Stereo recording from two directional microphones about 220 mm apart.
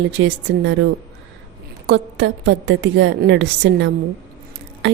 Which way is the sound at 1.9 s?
55° right (ahead or behind).